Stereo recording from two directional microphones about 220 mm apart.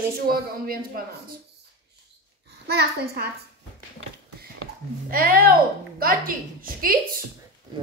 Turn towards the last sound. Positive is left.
turn(degrees=-40)  # may be behind; listen again after turning